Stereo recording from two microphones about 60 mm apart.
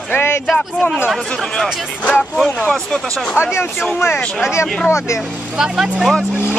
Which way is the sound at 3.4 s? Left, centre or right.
Left.